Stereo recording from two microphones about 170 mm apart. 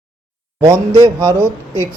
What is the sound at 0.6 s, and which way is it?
Speech, 20° right (ahead or behind).